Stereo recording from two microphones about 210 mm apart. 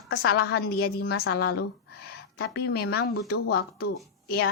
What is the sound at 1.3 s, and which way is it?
Speech, 50° left (ahead or behind).